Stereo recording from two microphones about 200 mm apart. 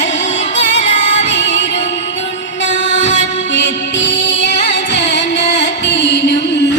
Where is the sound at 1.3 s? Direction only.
60° left (ahead or behind).